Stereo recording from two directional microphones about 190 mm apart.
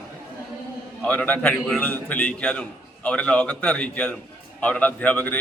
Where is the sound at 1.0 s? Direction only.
10° left (ahead or behind).